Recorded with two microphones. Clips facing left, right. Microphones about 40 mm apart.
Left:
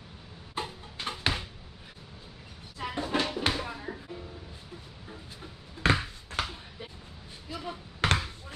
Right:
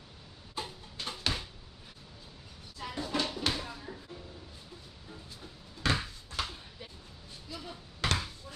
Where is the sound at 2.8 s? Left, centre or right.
Left.